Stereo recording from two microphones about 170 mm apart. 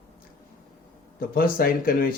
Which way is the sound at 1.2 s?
60° left (ahead or behind).